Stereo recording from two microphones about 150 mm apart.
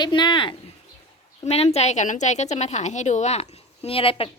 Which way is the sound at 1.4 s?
45° left (ahead or behind).